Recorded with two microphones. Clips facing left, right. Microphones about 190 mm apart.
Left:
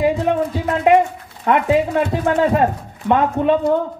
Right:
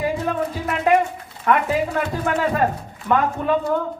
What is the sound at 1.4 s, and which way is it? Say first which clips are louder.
A woman's voice: left 4 dB; 25° left (ahead or behind).